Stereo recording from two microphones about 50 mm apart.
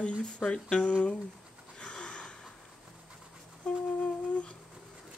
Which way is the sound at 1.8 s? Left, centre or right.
Centre.